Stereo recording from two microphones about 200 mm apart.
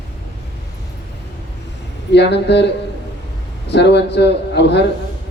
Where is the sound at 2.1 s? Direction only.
55° left (ahead or behind).